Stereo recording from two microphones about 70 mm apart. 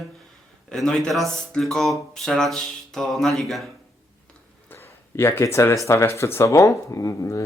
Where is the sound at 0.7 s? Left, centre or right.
Centre.